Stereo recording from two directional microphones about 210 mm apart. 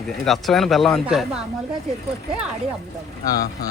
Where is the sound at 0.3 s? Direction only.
Centre (ahead or behind).